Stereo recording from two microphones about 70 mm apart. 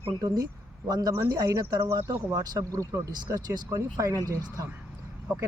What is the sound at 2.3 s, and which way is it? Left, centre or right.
Speech, right.